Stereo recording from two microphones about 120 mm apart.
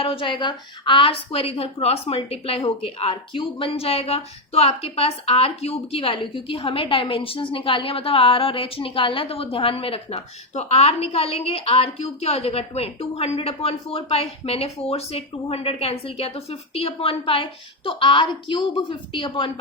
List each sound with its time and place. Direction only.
0.0 s a woman's voice: 50° left (ahead or behind)